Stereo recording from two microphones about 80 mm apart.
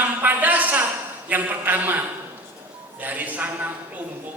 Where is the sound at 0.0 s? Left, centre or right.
Right.